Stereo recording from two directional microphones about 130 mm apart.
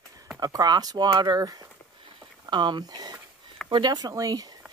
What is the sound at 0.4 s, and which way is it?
Speech, 30° right (ahead or behind).